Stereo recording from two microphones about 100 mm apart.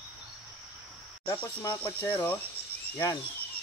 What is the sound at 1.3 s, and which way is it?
Speech, 25° left (ahead or behind).